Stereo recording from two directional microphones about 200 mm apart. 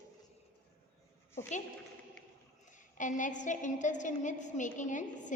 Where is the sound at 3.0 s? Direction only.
40° left (ahead or behind).